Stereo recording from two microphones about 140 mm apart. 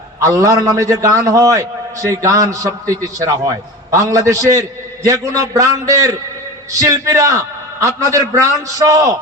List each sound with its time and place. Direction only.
0.2 s a man's voice: 25° right (ahead or behind)